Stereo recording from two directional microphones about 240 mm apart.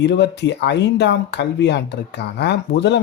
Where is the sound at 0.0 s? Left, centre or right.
Left.